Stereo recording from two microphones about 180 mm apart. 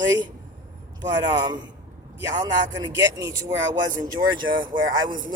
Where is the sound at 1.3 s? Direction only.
20° right (ahead or behind).